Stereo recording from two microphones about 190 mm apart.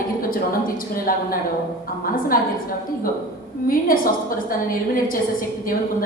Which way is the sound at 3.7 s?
50° left (ahead or behind).